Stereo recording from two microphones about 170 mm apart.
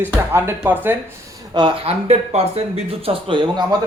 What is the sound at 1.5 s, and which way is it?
Speech, 30° right (ahead or behind).